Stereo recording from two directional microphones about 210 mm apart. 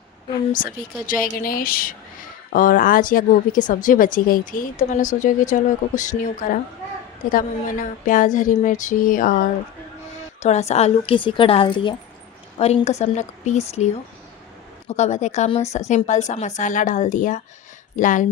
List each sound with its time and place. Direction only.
1.0 s a woman's voice: 40° left (ahead or behind)